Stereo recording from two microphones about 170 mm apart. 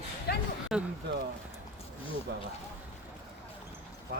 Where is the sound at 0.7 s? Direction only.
Centre (ahead or behind).